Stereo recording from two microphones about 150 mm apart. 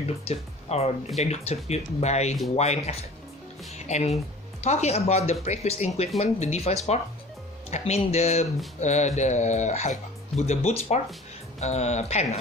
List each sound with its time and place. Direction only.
0.2 s speech: 45° left (ahead or behind)